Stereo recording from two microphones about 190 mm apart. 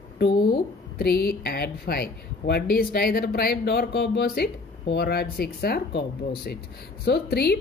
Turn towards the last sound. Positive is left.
turn(degrees=60)  # may be behind; listen again after turning